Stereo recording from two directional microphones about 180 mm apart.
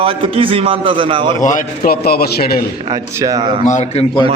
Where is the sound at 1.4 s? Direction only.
50° left (ahead or behind).